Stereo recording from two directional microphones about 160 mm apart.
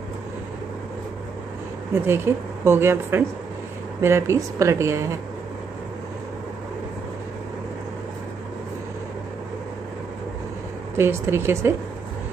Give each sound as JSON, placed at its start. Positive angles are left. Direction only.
{"t": 2.0, "sound": "a woman's voice", "side_deg": -15}
{"t": 11.0, "sound": "a woman's voice", "side_deg": -15}